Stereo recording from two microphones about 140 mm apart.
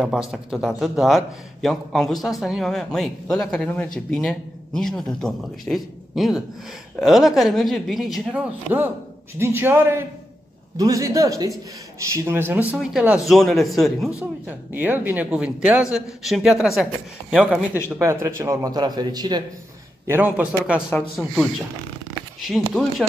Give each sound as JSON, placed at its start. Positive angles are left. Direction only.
{"t": 0.0, "sound": "a man's voice", "side_deg": -5}
{"t": 14.2, "sound": "speech", "side_deg": -15}
{"t": 17.9, "sound": "a man's voice", "side_deg": -20}
{"t": 20.1, "sound": "speech", "side_deg": -10}
{"t": 22.5, "sound": "speech", "side_deg": 0}